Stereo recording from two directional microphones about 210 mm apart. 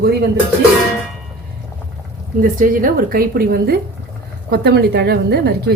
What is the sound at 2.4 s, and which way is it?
A woman's voice, 40° right (ahead or behind).